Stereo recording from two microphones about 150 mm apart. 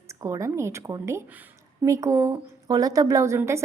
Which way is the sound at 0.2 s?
20° right (ahead or behind).